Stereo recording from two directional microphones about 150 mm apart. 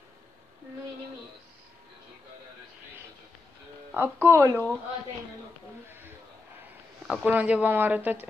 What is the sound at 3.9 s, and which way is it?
Speech, 15° right (ahead or behind).